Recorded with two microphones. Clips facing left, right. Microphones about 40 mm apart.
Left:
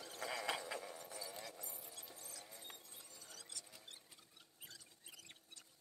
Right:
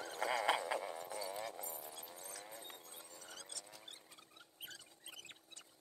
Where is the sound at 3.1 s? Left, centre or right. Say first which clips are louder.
Right 4 dB; right.